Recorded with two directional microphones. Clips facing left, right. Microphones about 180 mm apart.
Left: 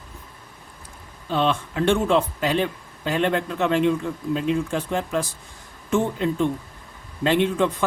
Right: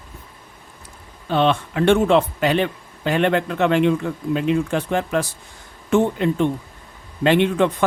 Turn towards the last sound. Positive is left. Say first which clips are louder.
# right 3 dB
turn(degrees=-70)  # may be behind; listen again after turning